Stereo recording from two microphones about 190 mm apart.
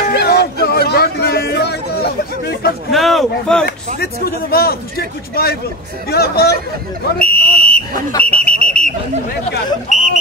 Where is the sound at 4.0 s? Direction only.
55° left (ahead or behind).